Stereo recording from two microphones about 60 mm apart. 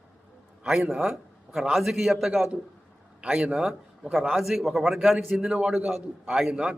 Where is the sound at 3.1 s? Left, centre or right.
Centre.